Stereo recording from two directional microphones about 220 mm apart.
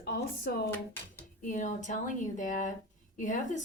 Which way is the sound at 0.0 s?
45° left (ahead or behind).